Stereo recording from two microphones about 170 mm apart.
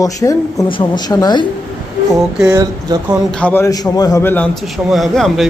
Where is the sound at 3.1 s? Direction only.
5° left (ahead or behind).